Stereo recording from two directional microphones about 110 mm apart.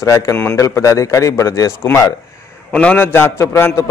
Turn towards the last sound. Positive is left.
turn(degrees=20)  # may be behind; listen again after turning